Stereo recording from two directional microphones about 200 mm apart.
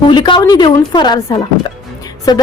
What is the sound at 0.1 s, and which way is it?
A woman's voice, 25° left (ahead or behind).